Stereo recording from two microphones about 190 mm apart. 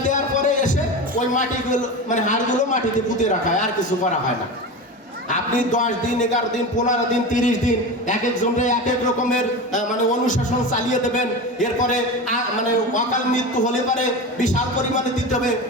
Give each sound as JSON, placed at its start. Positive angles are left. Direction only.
{"t": 0.1, "sound": "music", "side_deg": 40}
{"t": 1.3, "sound": "a man's voice", "side_deg": 40}
{"t": 5.3, "sound": "a man's voice", "side_deg": 40}